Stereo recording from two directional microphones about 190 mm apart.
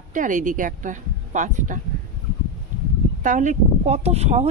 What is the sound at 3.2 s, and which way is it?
Speech, 40° right (ahead or behind).